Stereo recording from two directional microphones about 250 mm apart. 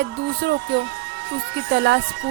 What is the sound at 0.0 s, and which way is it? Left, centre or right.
Speech, right.